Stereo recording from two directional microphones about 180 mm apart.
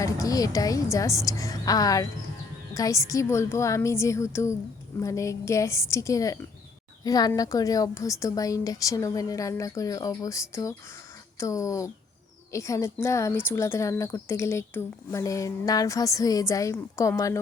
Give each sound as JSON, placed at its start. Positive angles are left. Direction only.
{"t": 0.0, "sound": "a woman's voice", "side_deg": 20}